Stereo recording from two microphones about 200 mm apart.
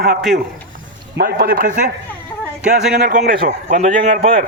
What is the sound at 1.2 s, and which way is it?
Speech, 50° right (ahead or behind).